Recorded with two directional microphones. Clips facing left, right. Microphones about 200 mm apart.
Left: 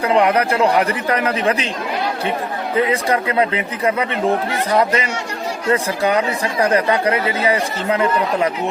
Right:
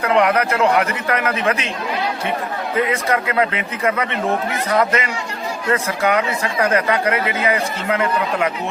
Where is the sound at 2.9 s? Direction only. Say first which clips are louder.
Left 2 dB; 30° left (ahead or behind).